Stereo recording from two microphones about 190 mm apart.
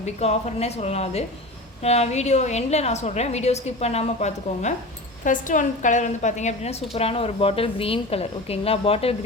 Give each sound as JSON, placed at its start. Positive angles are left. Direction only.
{"t": 0.0, "sound": "a woman's voice", "side_deg": 35}